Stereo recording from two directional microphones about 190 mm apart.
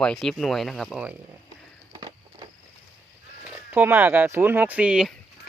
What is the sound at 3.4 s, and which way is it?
Speech, 10° right (ahead or behind).